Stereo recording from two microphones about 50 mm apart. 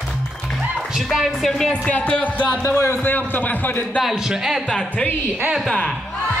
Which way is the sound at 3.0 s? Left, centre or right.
Left.